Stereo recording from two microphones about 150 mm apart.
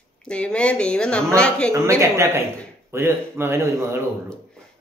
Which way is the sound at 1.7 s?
20° right (ahead or behind).